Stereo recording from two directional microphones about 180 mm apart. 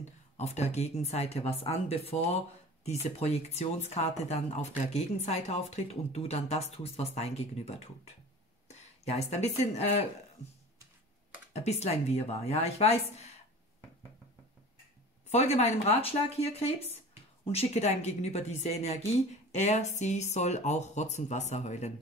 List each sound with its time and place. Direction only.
0.4 s speech: 35° left (ahead or behind)
8.6 s a sound: 40° left (ahead or behind)
9.8 s speech: 35° left (ahead or behind)
11.5 s speech: 35° left (ahead or behind)
15.2 s speech: 40° left (ahead or behind)